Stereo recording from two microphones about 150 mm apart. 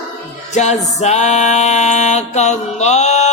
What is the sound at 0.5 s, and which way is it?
Music, 50° left (ahead or behind).